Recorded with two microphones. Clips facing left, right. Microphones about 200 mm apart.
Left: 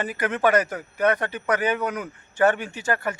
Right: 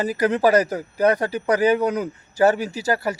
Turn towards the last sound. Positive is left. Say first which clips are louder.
# right 4 dB
turn(degrees=-35)  # may be behind; listen again after turning